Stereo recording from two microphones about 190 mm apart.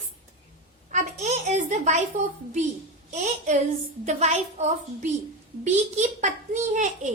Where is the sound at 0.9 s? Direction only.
35° right (ahead or behind).